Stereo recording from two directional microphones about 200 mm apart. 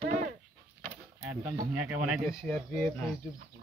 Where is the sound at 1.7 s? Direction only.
5° right (ahead or behind).